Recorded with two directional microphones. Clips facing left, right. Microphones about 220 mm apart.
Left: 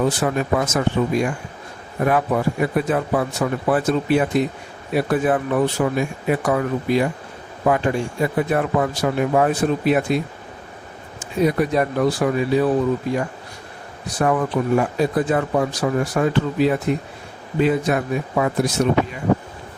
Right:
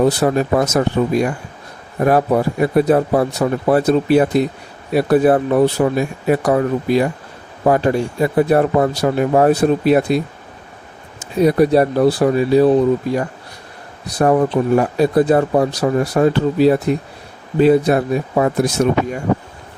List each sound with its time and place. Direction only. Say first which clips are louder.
0.0 s speech: right 5 dB; 40° right (ahead or behind)
11.2 s speech: right 6 dB; 35° right (ahead or behind)
14.1 s speech: right 6 dB; 35° right (ahead or behind)